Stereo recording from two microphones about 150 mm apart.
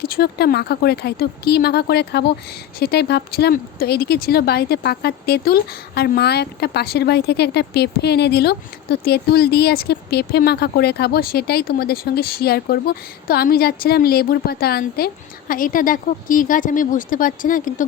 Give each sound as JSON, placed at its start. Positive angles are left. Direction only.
{"t": 0.0, "sound": "speech", "side_deg": 90}